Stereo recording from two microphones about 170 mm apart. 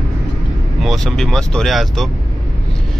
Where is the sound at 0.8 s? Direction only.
Centre (ahead or behind).